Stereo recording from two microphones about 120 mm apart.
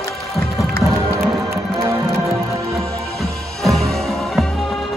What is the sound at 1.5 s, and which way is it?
Music, 25° right (ahead or behind).